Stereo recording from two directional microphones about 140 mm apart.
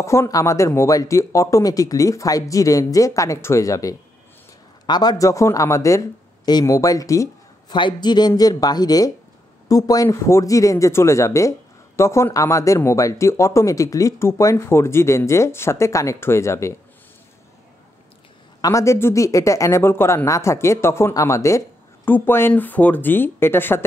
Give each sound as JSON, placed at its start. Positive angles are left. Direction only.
{"t": 0.0, "sound": "speech", "side_deg": 20}
{"t": 18.6, "sound": "speech", "side_deg": 25}